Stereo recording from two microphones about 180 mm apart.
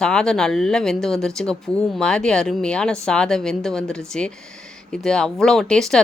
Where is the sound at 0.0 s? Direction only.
5° left (ahead or behind).